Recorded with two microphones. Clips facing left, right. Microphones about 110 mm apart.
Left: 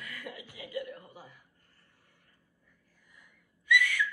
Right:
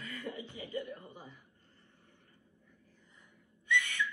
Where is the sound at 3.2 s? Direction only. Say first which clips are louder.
Left 5 dB; 20° right (ahead or behind).